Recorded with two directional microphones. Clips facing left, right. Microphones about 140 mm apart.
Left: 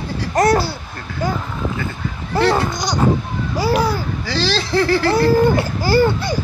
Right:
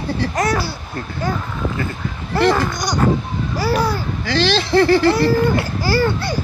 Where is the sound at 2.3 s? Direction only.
15° left (ahead or behind).